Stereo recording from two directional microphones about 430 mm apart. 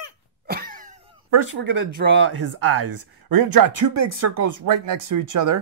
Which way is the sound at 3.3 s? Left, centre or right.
Right.